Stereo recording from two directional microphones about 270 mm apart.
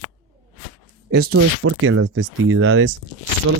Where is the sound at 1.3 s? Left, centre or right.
Right.